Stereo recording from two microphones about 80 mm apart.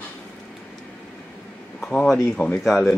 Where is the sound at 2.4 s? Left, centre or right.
Left.